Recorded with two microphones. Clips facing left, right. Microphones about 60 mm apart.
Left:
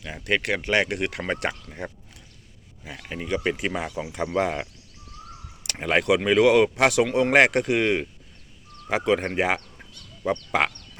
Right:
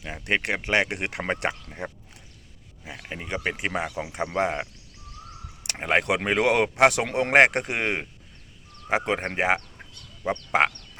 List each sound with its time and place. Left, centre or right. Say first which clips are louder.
0.0 s speech: left 1 dB; right
3.2 s speech: left 3 dB; right